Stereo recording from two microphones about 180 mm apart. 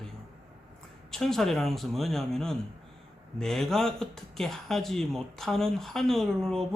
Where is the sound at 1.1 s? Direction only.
Centre (ahead or behind).